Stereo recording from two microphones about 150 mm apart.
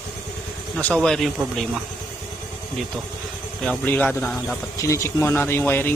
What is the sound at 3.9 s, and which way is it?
Speech, 10° left (ahead or behind).